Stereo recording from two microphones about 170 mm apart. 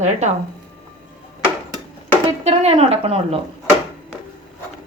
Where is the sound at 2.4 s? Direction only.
40° right (ahead or behind).